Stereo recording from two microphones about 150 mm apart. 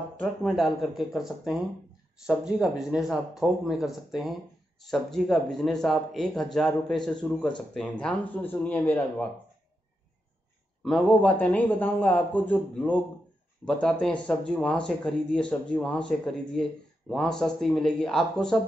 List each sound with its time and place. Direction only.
0.2 s a man's voice: 5° left (ahead or behind)
10.8 s a man's voice: 5° left (ahead or behind)